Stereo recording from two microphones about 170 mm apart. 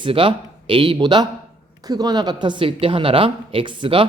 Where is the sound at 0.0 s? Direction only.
30° right (ahead or behind).